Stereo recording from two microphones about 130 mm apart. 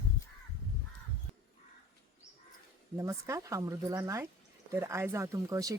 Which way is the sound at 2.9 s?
25° right (ahead or behind).